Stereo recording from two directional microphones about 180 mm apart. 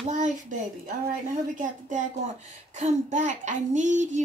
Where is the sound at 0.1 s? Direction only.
45° right (ahead or behind).